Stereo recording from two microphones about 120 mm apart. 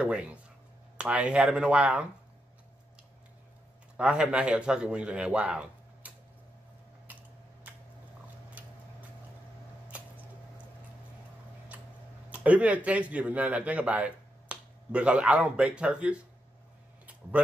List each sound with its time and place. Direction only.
0.0 s speech: 10° right (ahead or behind)
3.9 s a man's voice: 5° right (ahead or behind)
7.1 s typing: 15° right (ahead or behind)
9.9 s a sound: 10° right (ahead or behind)
12.3 s a man's voice: 10° right (ahead or behind)
17.0 s a sound: 10° right (ahead or behind)